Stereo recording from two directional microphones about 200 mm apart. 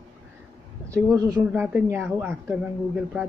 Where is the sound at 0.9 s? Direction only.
20° right (ahead or behind).